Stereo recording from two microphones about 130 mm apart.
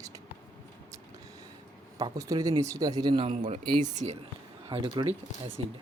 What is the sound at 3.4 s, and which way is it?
Speech, 60° right (ahead or behind).